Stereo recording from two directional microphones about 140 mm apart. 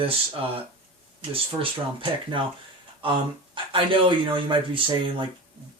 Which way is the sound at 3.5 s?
40° right (ahead or behind).